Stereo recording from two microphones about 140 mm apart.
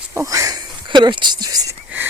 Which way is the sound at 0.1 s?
20° right (ahead or behind).